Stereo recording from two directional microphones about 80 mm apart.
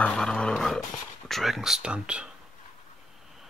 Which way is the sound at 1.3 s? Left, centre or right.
Centre.